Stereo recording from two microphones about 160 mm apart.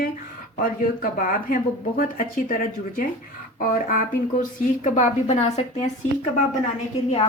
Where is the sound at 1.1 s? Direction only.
60° left (ahead or behind).